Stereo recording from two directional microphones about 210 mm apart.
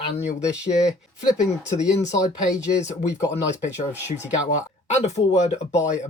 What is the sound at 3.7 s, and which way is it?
Speech, 10° right (ahead or behind).